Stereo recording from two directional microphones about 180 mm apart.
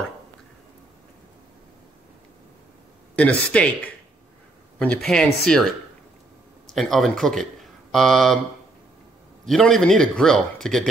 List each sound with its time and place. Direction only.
3.2 s speech: 5° left (ahead or behind)
9.5 s speech: 5° left (ahead or behind)